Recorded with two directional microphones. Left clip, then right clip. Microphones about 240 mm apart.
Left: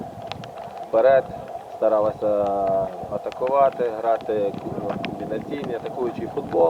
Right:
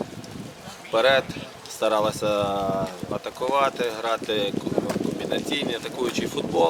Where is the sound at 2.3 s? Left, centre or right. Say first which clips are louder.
Left 3 dB; right.